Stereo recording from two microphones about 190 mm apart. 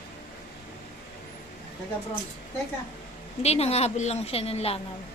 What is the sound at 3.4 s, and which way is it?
A woman's voice, 35° left (ahead or behind).